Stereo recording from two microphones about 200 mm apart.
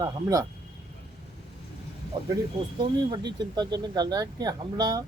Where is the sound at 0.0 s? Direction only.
15° right (ahead or behind).